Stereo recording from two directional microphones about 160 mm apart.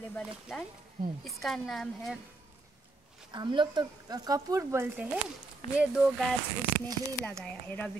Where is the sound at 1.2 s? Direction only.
Centre (ahead or behind).